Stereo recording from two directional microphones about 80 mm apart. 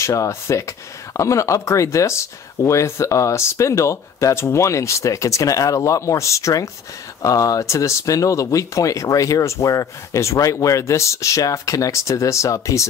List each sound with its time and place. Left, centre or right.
0.0 s speech: left